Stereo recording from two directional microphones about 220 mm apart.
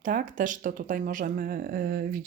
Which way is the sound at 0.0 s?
35° right (ahead or behind).